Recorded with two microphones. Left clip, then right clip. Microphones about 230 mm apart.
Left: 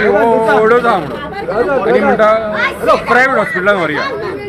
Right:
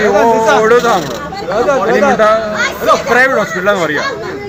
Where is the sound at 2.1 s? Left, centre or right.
Centre.